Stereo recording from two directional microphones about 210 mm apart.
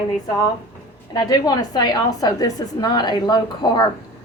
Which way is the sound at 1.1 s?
20° left (ahead or behind).